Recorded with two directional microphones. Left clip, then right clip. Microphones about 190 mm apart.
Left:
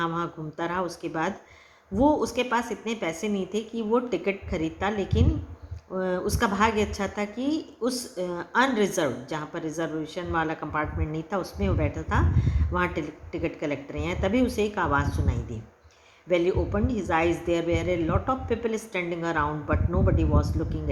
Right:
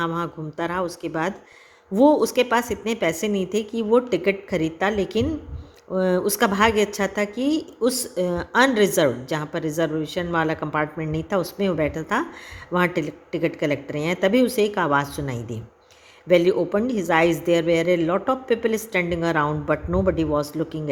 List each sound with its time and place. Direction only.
0.0 s a woman's voice: 40° right (ahead or behind)